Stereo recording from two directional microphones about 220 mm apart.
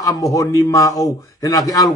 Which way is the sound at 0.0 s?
15° left (ahead or behind).